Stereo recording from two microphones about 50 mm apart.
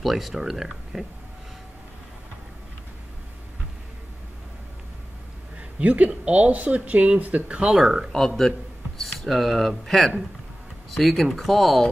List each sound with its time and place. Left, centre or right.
0.0 s speech: centre
5.8 s speech: right
7.8 s speech: centre
8.4 s speech: centre